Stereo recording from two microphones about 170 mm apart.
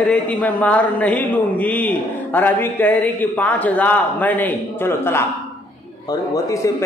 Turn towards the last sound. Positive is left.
turn(degrees=20)  # may be behind; listen again after turning